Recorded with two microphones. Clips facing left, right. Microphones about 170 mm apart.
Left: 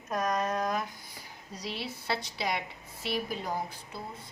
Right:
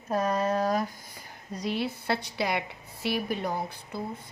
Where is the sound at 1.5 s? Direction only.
55° right (ahead or behind).